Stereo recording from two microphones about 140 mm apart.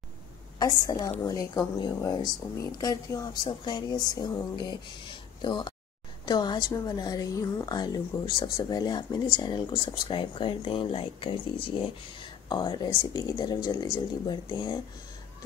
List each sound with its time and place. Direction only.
0.6 s a woman's voice: 25° left (ahead or behind)